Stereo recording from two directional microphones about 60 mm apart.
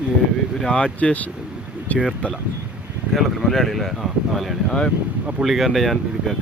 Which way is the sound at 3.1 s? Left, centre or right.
Centre.